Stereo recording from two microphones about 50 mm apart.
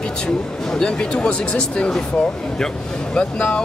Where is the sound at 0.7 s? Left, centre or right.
Centre.